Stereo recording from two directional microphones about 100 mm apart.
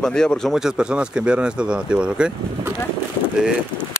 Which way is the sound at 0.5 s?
5° right (ahead or behind).